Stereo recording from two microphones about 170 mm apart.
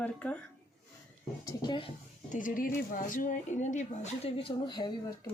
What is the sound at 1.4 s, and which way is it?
Speech, 20° left (ahead or behind).